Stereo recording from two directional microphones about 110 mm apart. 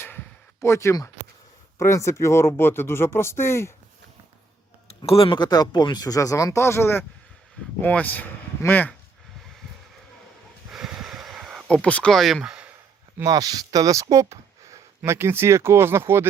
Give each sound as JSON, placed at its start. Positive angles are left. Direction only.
{"t": 0.6, "sound": "speech", "side_deg": 25}
{"t": 5.0, "sound": "speech", "side_deg": 55}
{"t": 10.7, "sound": "a sound", "side_deg": -5}
{"t": 11.7, "sound": "speech", "side_deg": 10}
{"t": 13.2, "sound": "speech", "side_deg": -35}